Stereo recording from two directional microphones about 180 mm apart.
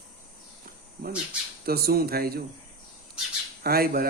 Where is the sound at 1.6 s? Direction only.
60° right (ahead or behind).